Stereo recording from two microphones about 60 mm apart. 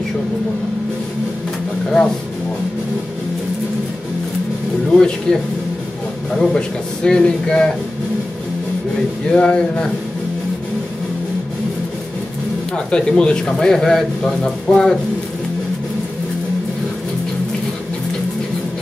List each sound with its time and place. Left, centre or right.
4.9 s speech: centre
9.3 s speech: centre
12.7 s speech: centre